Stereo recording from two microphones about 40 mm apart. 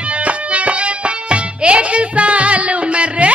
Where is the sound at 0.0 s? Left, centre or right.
Right.